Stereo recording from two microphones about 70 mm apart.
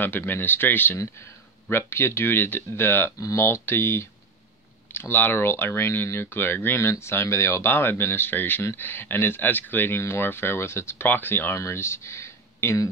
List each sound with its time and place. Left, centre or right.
0.0 s speech: left